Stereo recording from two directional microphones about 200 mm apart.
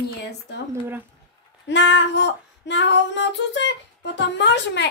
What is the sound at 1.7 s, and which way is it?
Female singing, 65° left (ahead or behind).